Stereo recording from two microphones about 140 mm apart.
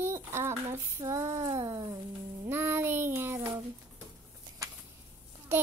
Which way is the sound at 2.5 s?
15° right (ahead or behind).